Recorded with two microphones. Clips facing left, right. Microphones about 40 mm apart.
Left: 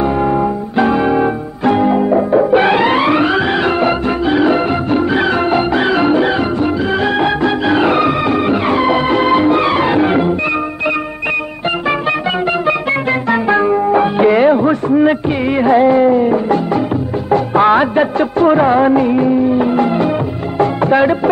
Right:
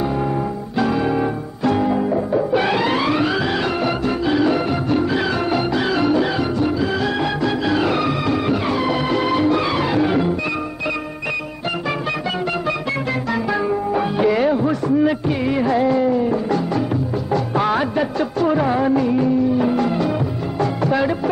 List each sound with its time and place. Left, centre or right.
0.7 s music: left
13.3 s music: left